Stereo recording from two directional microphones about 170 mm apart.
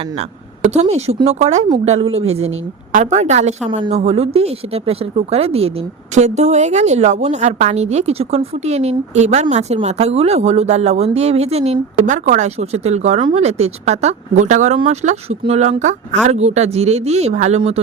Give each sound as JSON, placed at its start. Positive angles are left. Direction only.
{"t": 0.7, "sound": "a woman's voice", "side_deg": -40}